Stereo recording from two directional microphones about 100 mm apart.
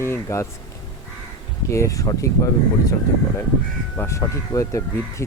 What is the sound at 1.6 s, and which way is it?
Speech, 30° left (ahead or behind).